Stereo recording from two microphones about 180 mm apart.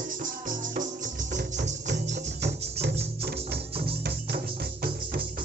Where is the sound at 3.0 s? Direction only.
65° right (ahead or behind).